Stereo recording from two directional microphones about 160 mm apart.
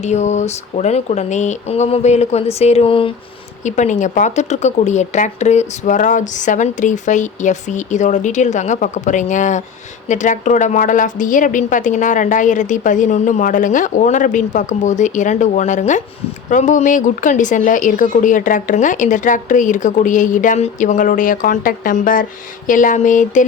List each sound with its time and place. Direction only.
0.0 s speech: 45° left (ahead or behind)
3.6 s speech: 50° left (ahead or behind)